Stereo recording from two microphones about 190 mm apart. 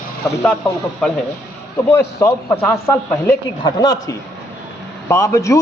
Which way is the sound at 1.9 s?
15° left (ahead or behind).